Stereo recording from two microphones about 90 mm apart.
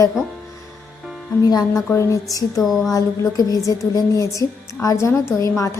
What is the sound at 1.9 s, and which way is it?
Speech, 35° left (ahead or behind).